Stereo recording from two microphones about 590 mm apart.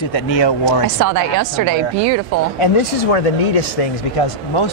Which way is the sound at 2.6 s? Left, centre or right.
Left.